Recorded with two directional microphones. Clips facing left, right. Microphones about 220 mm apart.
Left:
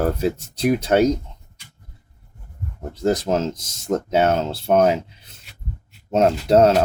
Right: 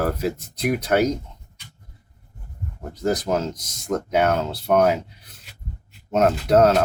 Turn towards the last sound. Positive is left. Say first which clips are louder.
# left 2 dB
turn(degrees=30)  # may be behind; listen again after turning